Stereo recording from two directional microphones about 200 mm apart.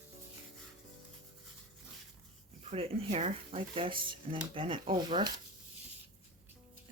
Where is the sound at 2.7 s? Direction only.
30° right (ahead or behind).